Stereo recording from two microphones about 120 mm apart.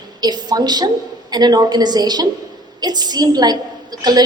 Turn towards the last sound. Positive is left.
turn(degrees=-35)  # may be behind; listen again after turning